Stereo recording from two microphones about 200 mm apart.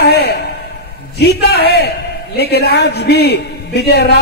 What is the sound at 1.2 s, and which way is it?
A man's voice, 55° left (ahead or behind).